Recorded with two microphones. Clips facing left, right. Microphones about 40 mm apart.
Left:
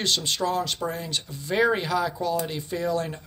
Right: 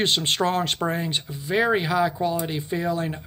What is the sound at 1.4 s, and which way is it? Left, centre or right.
Speech, centre.